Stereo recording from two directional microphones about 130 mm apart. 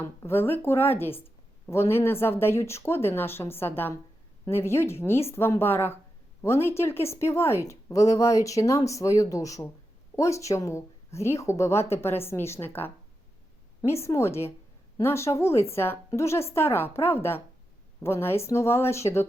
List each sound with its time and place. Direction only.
0.0 s speech: 20° left (ahead or behind)